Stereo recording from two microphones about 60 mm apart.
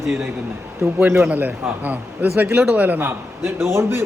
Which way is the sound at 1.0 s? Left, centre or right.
Right.